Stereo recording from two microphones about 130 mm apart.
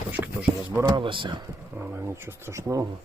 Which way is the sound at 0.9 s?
35° right (ahead or behind).